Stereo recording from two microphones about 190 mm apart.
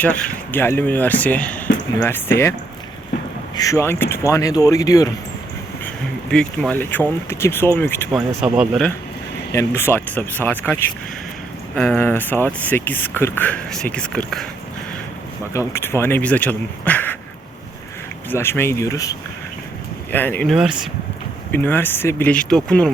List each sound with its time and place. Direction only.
0.0 s speech: 10° left (ahead or behind)
3.5 s speech: 15° left (ahead or behind)
6.3 s speech: 5° left (ahead or behind)
8.5 s speech: 5° right (ahead or behind)
9.5 s speech: 15° left (ahead or behind)
15.5 s speech: 15° left (ahead or behind)
18.3 s speech: 10° left (ahead or behind)
20.5 s speech: 5° right (ahead or behind)
21.5 s speech: 10° left (ahead or behind)